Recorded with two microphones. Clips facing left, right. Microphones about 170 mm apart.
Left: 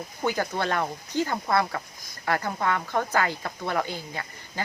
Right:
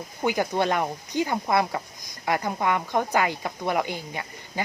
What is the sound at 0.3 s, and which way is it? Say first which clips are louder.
Speech: right 3 dB; 15° right (ahead or behind).